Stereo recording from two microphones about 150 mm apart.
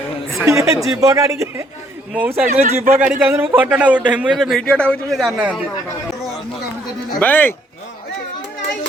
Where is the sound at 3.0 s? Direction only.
10° right (ahead or behind).